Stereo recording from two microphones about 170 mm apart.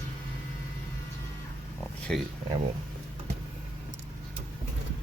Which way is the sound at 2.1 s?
5° left (ahead or behind).